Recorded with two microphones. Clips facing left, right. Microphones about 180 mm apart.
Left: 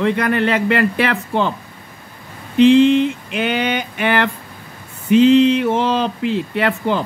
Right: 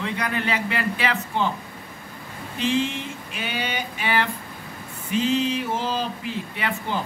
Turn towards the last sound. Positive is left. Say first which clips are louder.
# left 10 dB
turn(degrees=65)  # may be behind; listen again after turning